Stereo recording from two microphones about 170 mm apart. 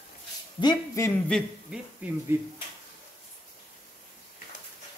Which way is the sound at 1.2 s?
5° left (ahead or behind).